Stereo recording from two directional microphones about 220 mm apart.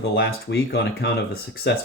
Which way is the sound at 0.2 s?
45° left (ahead or behind).